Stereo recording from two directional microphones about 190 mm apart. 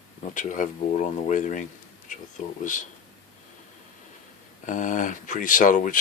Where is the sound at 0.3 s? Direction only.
40° left (ahead or behind).